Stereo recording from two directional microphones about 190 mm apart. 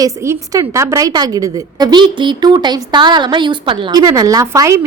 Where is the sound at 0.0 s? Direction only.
15° right (ahead or behind).